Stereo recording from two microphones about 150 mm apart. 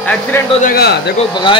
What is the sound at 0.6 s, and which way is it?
Speech, 80° left.